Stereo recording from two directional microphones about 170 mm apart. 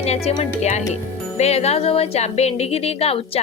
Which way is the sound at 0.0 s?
40° left (ahead or behind).